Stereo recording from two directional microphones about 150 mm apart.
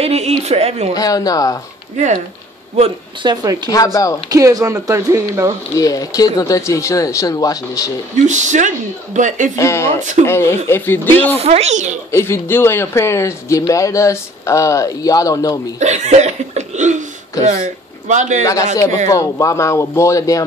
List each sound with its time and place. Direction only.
0.0 s speech: 40° right (ahead or behind)
0.9 s speech: 25° left (ahead or behind)
3.2 s speech: 30° right (ahead or behind)
3.7 s speech: 25° left (ahead or behind)
4.3 s speech: 25° right (ahead or behind)
5.8 s speech: 25° left (ahead or behind)
8.3 s speech: 55° right (ahead or behind)
9.6 s speech: 20° left (ahead or behind)
11.3 s speech: 45° right (ahead or behind)
12.1 s speech: 15° left (ahead or behind)
15.8 s speech: 50° right (ahead or behind)
18.0 s speech: 55° right (ahead or behind)
18.4 s speech: 20° left (ahead or behind)